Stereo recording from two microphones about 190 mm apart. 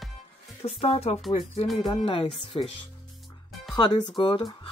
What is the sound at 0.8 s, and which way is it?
Speech, 30° left (ahead or behind).